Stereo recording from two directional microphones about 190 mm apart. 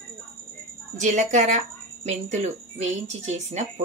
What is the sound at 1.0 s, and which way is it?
Speech, 40° right (ahead or behind).